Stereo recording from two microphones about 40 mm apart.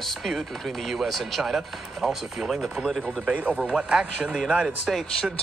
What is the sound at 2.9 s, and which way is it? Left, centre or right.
Speech, centre.